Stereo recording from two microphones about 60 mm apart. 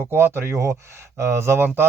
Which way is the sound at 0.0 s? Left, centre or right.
Right.